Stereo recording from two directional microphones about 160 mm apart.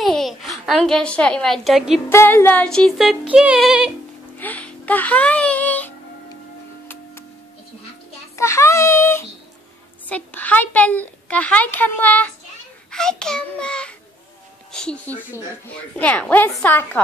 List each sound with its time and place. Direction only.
0.0 s a woman's voice: centre (ahead or behind)
2.0 s music: 15° left (ahead or behind); by 3.9 s 5° right (ahead or behind)
4.4 s music: 10° left (ahead or behind)
8.4 s a sound: 15° left (ahead or behind)
10.0 s a woman's voice: 10° left (ahead or behind)
12.9 s music: 5° left (ahead or behind)
15.7 s a woman's voice: 10° left (ahead or behind)